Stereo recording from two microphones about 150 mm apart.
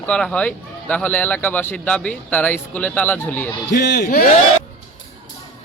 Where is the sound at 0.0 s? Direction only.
5° left (ahead or behind).